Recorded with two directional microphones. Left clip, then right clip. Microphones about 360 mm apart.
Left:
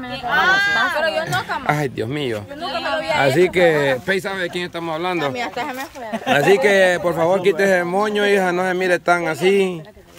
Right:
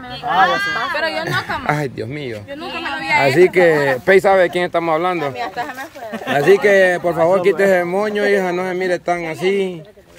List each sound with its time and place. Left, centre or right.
0.3 s speech: centre
1.1 s speech: centre
6.3 s speech: centre